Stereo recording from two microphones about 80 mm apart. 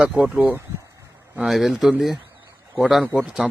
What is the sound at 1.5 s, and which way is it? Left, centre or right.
Speech, centre.